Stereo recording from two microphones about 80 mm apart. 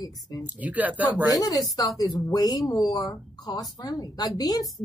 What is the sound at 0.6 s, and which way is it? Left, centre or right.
Speech, centre.